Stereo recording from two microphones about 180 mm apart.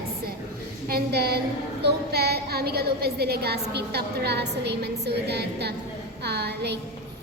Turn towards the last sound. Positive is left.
turn(degrees=-65)  # may be behind; listen again after turning